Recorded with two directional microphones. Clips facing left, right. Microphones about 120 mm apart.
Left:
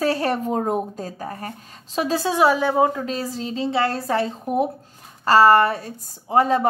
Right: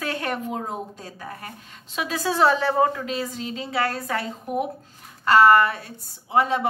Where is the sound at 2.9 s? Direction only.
30° left (ahead or behind).